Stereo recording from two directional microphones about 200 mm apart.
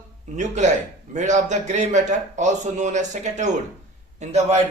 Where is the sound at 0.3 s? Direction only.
35° right (ahead or behind).